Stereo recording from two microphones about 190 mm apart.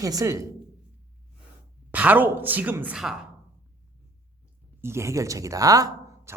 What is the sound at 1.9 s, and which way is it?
Speech, 10° right (ahead or behind).